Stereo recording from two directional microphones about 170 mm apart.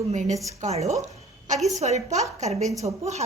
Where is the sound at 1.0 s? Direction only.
45° right (ahead or behind).